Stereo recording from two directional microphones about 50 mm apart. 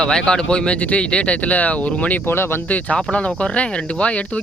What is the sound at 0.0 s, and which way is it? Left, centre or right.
Speech, centre.